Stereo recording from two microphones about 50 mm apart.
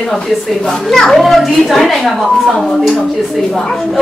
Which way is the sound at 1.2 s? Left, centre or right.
Centre.